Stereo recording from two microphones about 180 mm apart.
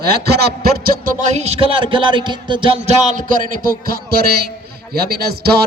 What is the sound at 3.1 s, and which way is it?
A man's voice, 50° right (ahead or behind).